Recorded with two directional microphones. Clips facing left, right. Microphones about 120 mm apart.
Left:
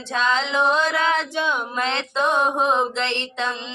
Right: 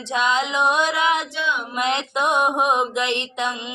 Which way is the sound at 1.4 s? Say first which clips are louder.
Left 2 dB; 40° left (ahead or behind).